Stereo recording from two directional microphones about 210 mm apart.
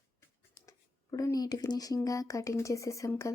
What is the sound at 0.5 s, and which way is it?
Speech, 15° left (ahead or behind).